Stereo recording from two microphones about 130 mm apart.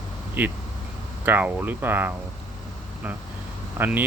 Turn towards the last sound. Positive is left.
turn(degrees=-15)  # may be behind; listen again after turning